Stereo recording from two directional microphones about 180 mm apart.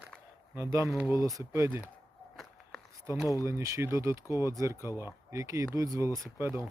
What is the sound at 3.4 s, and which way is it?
Speech, 15° right (ahead or behind).